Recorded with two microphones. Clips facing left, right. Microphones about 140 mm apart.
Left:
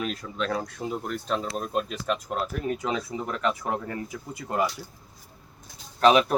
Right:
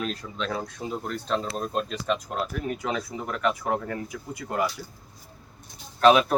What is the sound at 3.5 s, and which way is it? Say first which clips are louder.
Speech: right 2 dB; 10° left (ahead or behind).